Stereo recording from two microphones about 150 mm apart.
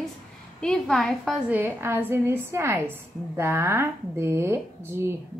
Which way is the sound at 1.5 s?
15° right (ahead or behind).